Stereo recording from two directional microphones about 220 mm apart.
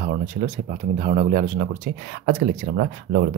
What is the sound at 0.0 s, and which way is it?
Speech, 35° right (ahead or behind).